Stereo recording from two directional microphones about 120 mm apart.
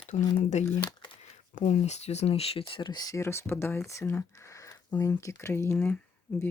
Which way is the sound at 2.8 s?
35° left (ahead or behind).